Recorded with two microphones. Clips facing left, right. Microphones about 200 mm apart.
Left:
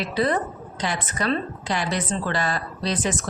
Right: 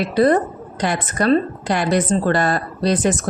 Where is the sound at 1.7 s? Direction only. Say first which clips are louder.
Right 8 dB; 60° right (ahead or behind).